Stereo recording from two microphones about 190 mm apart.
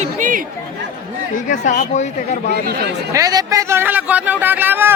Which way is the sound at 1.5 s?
40° left (ahead or behind).